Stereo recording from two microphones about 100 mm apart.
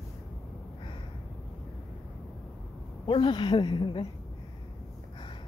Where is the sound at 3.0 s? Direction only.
55° left (ahead or behind).